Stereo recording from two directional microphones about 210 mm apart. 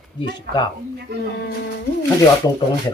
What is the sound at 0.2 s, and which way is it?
Speech, 20° left (ahead or behind).